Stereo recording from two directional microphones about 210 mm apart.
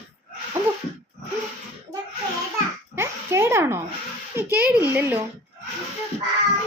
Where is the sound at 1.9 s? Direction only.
5° right (ahead or behind).